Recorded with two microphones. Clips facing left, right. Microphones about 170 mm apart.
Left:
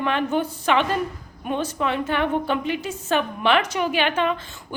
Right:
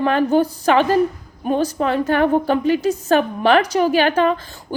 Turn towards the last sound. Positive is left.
turn(degrees=-40)  # may be behind; listen again after turning